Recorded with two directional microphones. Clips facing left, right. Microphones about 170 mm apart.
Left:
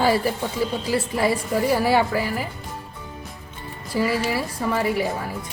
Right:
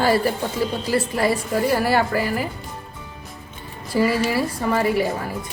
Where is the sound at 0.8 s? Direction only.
Centre (ahead or behind).